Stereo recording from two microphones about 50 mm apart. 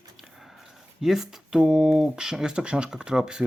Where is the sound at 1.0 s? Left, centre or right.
Centre.